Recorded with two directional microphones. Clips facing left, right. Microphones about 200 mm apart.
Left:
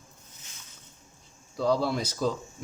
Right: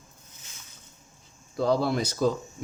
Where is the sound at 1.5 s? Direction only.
55° right (ahead or behind).